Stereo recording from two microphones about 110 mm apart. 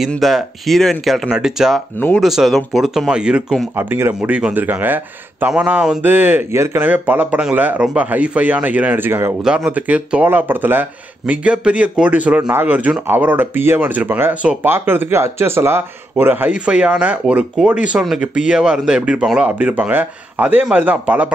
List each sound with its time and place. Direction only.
0.2 s speech: centre (ahead or behind)
3.7 s speech: 20° right (ahead or behind)